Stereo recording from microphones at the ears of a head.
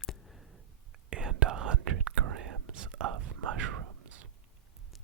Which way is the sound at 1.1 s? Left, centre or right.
Right.